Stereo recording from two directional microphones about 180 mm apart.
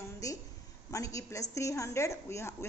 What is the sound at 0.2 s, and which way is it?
A woman's voice, 15° left (ahead or behind).